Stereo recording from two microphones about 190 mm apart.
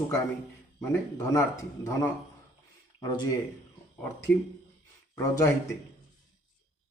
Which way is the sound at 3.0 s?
20° left (ahead or behind).